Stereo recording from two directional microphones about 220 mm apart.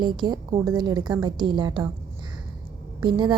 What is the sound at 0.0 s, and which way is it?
A woman's voice, 20° right (ahead or behind).